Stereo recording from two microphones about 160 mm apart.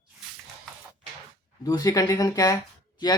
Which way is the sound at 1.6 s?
20° left (ahead or behind).